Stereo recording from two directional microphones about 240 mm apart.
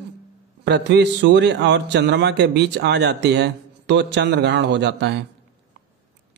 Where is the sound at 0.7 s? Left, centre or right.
Right.